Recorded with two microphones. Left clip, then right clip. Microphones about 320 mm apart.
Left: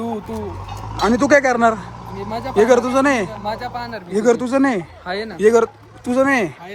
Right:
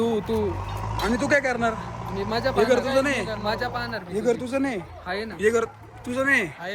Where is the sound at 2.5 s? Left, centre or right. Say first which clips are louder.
Left 8 dB; left.